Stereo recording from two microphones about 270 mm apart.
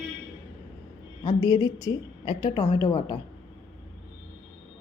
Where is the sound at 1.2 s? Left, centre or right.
Centre.